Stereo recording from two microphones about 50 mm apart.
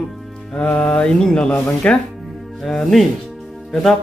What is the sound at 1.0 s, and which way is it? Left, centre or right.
Speech, centre.